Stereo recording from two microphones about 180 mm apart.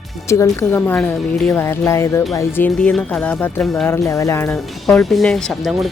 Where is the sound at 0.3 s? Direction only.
15° left (ahead or behind).